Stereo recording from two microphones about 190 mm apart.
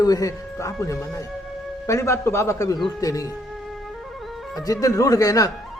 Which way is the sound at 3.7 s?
Centre (ahead or behind).